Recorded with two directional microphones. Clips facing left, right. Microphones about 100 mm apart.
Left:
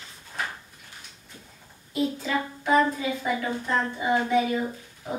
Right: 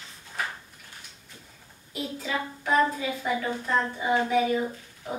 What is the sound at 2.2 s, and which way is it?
A woman's voice, 5° left (ahead or behind).